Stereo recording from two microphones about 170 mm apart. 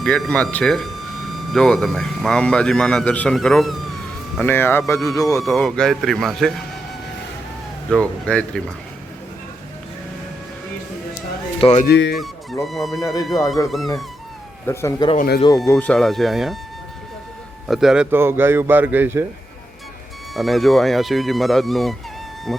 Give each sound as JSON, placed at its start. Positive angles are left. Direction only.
{"t": 0.0, "sound": "speech", "side_deg": 5}
{"t": 4.4, "sound": "speech", "side_deg": 15}
{"t": 5.4, "sound": "speech", "side_deg": 0}
{"t": 7.9, "sound": "speech", "side_deg": 5}
{"t": 11.6, "sound": "speech", "side_deg": 40}
{"t": 11.9, "sound": "speech", "side_deg": 90}
{"t": 12.1, "sound": "speech", "side_deg": 0}
{"t": 14.7, "sound": "speech", "side_deg": 15}
{"t": 17.7, "sound": "speech", "side_deg": 0}
{"t": 20.3, "sound": "speech", "side_deg": 0}